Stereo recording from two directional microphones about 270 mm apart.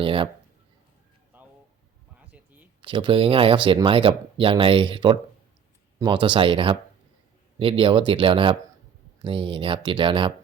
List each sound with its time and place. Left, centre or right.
0.0 s speech: centre
1.3 s a sound: centre
2.8 s speech: centre